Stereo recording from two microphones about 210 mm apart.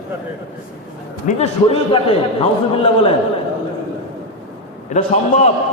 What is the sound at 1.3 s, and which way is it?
A man's voice, 30° left (ahead or behind).